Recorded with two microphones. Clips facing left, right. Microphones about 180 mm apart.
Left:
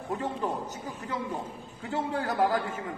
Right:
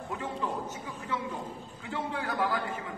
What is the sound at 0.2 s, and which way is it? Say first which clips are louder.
A man's voice: left 3 dB; 40° left (ahead or behind).